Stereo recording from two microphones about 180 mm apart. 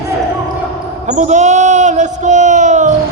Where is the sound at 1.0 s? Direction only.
40° right (ahead or behind).